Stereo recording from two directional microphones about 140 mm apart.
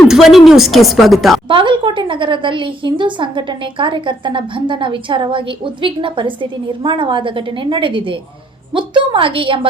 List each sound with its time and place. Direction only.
0.1 s a woman's voice: 5° right (ahead or behind)
1.5 s a woman's voice: 35° right (ahead or behind)